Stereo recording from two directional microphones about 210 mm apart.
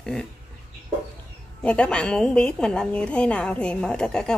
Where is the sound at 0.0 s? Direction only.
5° left (ahead or behind).